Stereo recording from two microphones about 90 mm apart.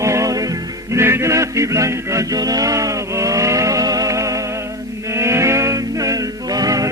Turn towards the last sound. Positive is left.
turn(degrees=-40)  # may be behind; listen again after turning